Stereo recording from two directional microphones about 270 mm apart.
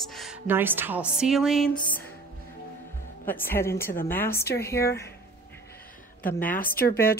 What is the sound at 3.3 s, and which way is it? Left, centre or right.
A woman's voice, centre.